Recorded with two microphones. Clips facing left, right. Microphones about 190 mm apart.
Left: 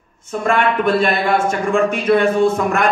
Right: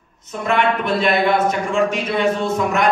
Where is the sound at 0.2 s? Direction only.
50° left (ahead or behind).